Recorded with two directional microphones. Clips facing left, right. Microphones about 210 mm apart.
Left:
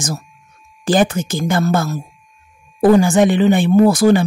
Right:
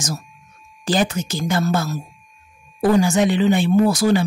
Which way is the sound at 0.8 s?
50° left (ahead or behind).